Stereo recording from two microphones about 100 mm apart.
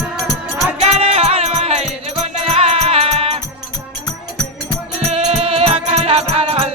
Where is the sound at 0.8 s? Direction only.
85° right.